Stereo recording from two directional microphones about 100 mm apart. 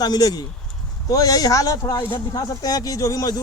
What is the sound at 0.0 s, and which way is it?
Speech, 40° left (ahead or behind).